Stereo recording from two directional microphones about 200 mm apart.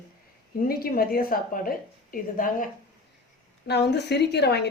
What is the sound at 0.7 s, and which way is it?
A woman's voice, 50° left (ahead or behind).